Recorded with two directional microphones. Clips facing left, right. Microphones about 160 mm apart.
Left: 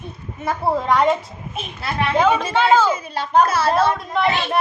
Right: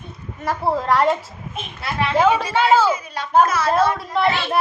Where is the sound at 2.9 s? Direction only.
30° left (ahead or behind).